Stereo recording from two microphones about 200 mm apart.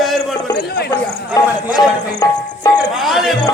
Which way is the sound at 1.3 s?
20° left (ahead or behind).